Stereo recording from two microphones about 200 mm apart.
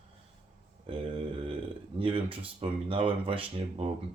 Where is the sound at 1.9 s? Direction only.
25° right (ahead or behind).